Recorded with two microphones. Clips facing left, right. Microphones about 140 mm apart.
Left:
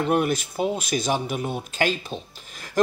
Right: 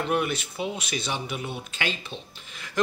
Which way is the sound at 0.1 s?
40° left (ahead or behind).